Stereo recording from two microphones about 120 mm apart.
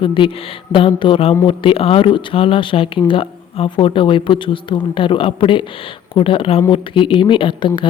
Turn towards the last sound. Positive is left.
turn(degrees=45)  # may be behind; listen again after turning